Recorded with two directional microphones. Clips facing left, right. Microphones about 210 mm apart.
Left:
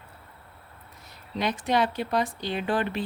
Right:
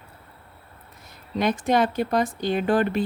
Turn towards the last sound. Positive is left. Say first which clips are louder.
# right 6 dB
turn(degrees=-45)  # may be behind; listen again after turning